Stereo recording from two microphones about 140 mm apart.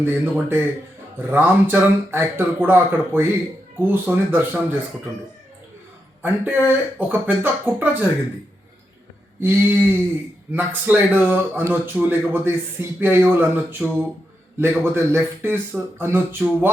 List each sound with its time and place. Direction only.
0.0 s a man's voice: 15° right (ahead or behind)
6.2 s a man's voice: 15° right (ahead or behind)
9.4 s a man's voice: 15° right (ahead or behind)